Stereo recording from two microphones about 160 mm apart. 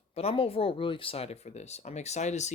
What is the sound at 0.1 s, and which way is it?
Speech, 40° left (ahead or behind).